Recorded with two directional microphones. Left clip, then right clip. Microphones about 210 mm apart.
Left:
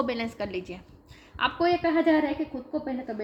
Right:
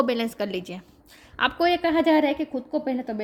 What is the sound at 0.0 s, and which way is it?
A woman's voice, 40° right (ahead or behind).